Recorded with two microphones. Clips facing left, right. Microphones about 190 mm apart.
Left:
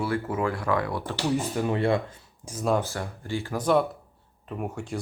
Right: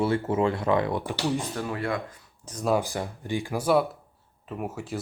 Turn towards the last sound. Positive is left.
turn(degrees=-5)  # may be behind; listen again after turning